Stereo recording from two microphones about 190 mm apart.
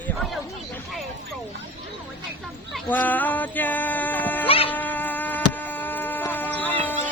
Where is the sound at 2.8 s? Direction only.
10° left (ahead or behind).